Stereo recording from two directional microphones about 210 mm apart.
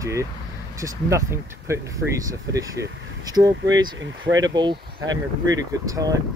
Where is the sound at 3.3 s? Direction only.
20° right (ahead or behind).